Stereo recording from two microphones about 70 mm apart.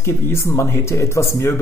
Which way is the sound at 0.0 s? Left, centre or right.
Left.